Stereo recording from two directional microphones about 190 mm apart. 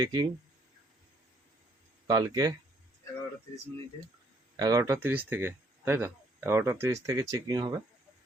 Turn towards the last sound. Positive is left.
turn(degrees=-20)  # may be behind; listen again after turning